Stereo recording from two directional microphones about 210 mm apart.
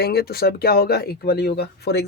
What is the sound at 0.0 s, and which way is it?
Speech, 50° left (ahead or behind).